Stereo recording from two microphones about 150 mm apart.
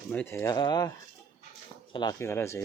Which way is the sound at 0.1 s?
15° left (ahead or behind).